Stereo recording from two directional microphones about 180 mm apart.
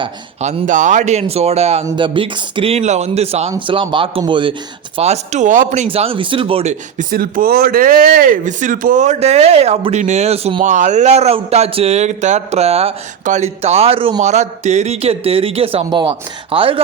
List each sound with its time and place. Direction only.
0.4 s speech: 40° right (ahead or behind)
1.8 s speech: 15° right (ahead or behind)
2.0 s a man's voice: 30° right (ahead or behind)
4.9 s speech: 35° right (ahead or behind)